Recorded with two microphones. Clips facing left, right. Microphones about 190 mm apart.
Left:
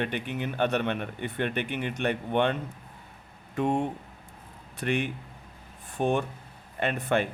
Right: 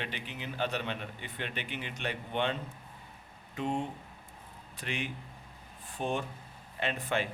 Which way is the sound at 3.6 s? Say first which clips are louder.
Left 7 dB; 55° left (ahead or behind).